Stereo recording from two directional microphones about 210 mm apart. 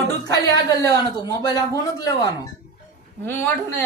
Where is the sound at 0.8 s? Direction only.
15° left (ahead or behind).